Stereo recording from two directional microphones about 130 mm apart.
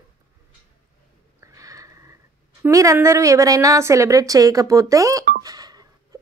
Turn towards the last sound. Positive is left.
turn(degrees=-30)  # may be behind; listen again after turning